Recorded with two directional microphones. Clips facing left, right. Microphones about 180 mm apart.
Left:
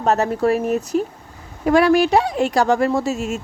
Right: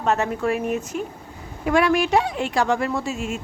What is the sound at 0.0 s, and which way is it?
Speech, 40° left (ahead or behind).